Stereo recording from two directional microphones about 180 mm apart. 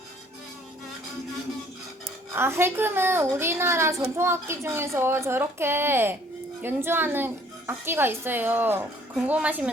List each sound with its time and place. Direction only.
2.3 s speech: 15° right (ahead or behind)